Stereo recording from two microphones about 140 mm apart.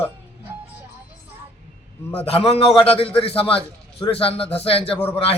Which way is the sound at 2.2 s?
45° left (ahead or behind).